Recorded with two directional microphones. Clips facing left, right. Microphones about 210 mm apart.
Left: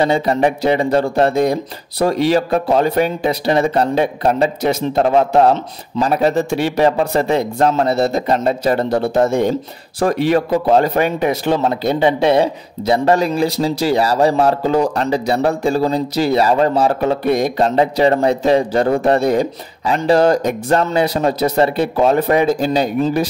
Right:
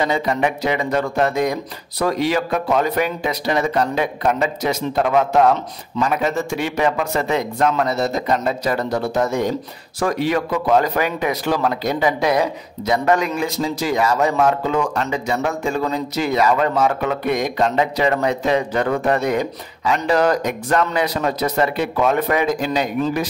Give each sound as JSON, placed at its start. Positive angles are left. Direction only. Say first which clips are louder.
{"t": 0.0, "sound": "speech", "louder": "left 5 dB", "side_deg": 30}